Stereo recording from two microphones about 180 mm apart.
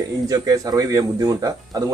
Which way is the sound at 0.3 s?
20° right (ahead or behind).